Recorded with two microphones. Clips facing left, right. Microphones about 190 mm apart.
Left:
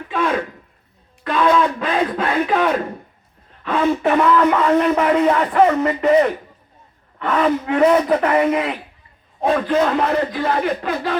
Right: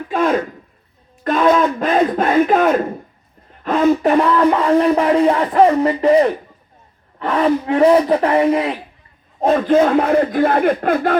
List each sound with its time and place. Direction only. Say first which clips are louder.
0.1 s a sound: right 4 dB; 45° right (ahead or behind)
1.2 s a man's voice: right 2 dB; 45° right (ahead or behind)
9.4 s speech: right 4 dB; 45° right (ahead or behind)